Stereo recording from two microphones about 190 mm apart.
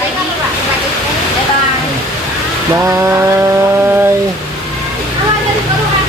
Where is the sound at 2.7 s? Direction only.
15° right (ahead or behind).